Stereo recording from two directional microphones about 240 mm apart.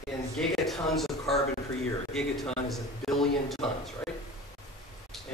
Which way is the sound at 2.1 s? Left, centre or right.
Centre.